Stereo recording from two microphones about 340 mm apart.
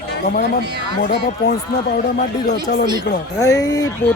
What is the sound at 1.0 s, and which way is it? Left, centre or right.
Speech, left.